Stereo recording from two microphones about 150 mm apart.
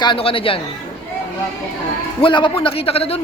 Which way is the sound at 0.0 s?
35° left (ahead or behind).